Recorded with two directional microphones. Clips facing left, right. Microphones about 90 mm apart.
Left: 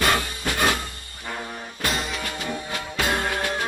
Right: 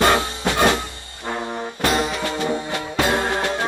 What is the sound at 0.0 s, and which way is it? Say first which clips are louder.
Music: right 5 dB; 25° right (ahead or behind).